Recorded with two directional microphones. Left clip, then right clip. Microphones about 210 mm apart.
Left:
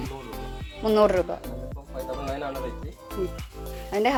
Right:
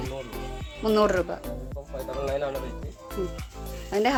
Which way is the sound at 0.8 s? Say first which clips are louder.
Left 2 dB; 10° right (ahead or behind).